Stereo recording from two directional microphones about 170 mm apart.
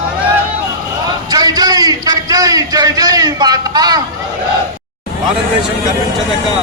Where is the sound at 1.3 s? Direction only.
25° right (ahead or behind).